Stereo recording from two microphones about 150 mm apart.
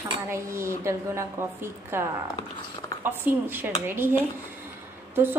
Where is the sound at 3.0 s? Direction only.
15° right (ahead or behind).